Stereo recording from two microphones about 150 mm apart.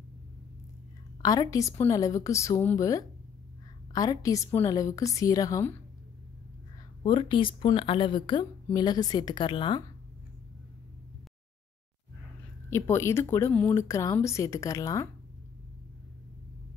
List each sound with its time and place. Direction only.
1.2 s a woman's voice: 25° left (ahead or behind)
7.0 s a woman's voice: 35° left (ahead or behind)
12.6 s speech: 15° left (ahead or behind)